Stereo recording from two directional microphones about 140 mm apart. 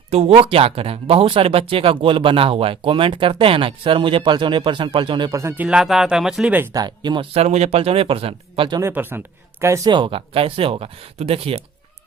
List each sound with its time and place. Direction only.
0.1 s speech: 45° right (ahead or behind); by 5.6 s 20° right (ahead or behind)
5.6 s speech: 5° right (ahead or behind)
6.7 s speech: 30° right (ahead or behind)
7.3 s speech: 50° right (ahead or behind)
8.8 s speech: 15° right (ahead or behind)
9.9 s speech: 35° right (ahead or behind)